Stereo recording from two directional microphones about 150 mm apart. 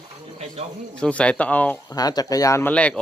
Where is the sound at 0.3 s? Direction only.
45° right (ahead or behind).